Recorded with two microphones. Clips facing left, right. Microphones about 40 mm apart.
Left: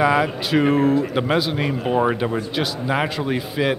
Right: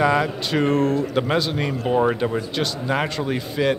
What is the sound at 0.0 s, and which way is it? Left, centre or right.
A man's voice, centre.